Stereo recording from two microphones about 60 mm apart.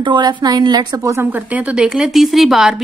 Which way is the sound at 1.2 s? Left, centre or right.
Right.